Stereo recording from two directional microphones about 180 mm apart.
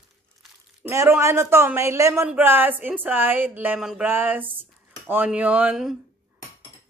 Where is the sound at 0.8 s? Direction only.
15° right (ahead or behind).